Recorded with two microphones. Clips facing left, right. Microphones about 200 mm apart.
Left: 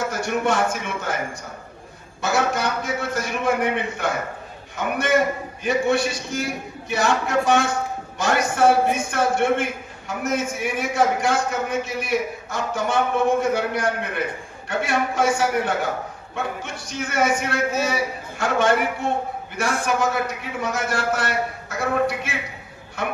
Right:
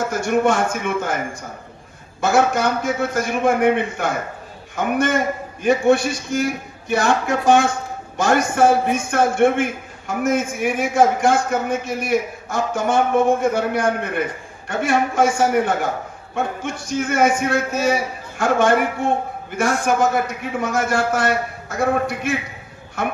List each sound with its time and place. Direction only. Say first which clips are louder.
0.1 s a man's voice: right 5 dB; 50° right (ahead or behind)